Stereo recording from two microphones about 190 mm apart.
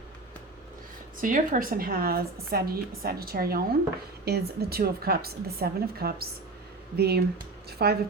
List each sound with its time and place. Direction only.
1.2 s a woman's voice: 45° right (ahead or behind)